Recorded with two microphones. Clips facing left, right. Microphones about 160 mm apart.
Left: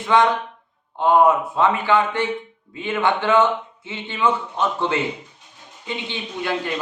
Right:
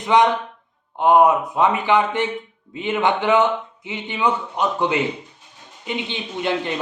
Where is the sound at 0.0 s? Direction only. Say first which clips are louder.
Right 1 dB; 20° right (ahead or behind).